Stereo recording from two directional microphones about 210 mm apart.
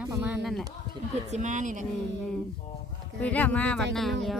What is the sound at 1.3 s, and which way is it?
Speech, 35° right (ahead or behind).